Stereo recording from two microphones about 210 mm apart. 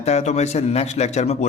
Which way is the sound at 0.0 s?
30° left (ahead or behind).